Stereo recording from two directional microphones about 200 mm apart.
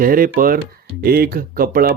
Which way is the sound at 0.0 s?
45° right (ahead or behind).